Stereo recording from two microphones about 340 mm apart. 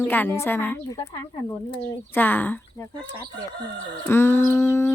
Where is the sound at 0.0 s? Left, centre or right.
Centre.